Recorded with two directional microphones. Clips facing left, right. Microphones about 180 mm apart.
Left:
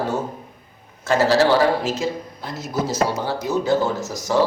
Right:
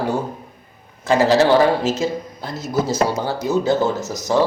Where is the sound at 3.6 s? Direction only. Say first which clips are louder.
Right 2 dB; 20° right (ahead or behind).